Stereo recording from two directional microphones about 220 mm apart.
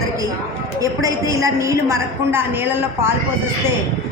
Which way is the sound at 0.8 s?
15° right (ahead or behind).